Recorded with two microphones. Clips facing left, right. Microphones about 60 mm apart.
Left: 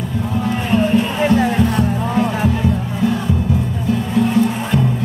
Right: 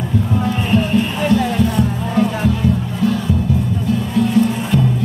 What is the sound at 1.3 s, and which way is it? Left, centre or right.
Music, left.